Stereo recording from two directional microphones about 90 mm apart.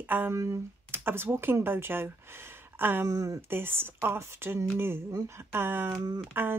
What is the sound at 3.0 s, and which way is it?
Speech, 35° right (ahead or behind).